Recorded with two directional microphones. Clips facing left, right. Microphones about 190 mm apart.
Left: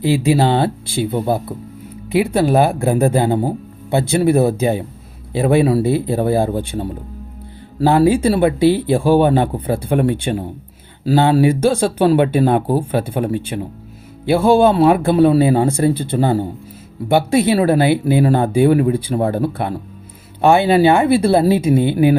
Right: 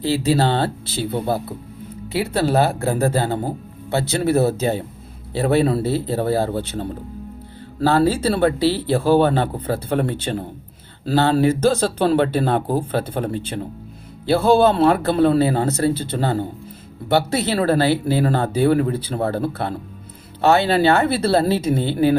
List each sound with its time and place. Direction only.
0.0 s speech: 15° left (ahead or behind)